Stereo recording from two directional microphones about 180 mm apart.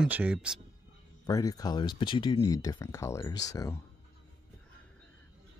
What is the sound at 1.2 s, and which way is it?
Speech, 20° left (ahead or behind).